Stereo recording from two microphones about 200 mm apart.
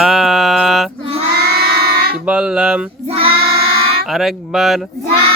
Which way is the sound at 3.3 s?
50° right (ahead or behind).